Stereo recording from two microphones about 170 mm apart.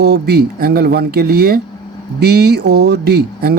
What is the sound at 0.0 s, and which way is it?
Speech, 70° right (ahead or behind).